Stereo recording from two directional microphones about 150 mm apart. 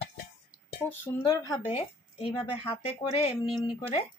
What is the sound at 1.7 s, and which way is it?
Speech, 40° left (ahead or behind).